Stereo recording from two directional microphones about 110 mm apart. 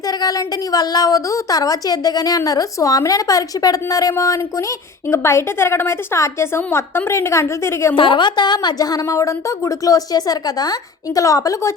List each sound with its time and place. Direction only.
0.1 s a woman's voice: 35° left (ahead or behind)
7.9 s a woman's voice: 50° left (ahead or behind); by 11.7 s 30° left (ahead or behind)